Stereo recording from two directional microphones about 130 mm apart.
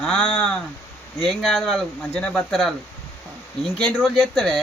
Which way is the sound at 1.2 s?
Centre (ahead or behind).